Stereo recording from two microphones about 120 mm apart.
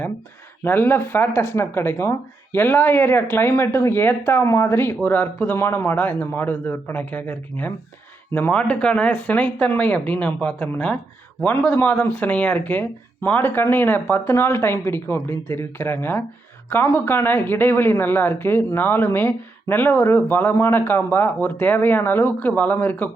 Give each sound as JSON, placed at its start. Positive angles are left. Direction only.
{"t": 0.6, "sound": "speech", "side_deg": 20}